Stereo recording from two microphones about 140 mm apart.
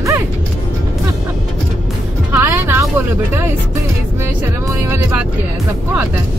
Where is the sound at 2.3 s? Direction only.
15° right (ahead or behind).